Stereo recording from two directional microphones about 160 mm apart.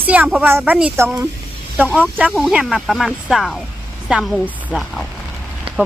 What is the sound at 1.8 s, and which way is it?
Speech, 10° left (ahead or behind).